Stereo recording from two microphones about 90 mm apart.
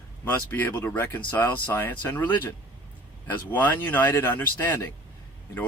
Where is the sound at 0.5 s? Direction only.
20° left (ahead or behind).